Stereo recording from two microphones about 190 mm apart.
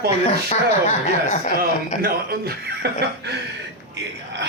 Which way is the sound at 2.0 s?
55° right (ahead or behind).